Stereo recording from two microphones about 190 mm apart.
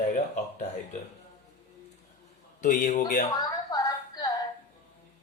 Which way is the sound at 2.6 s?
40° left (ahead or behind).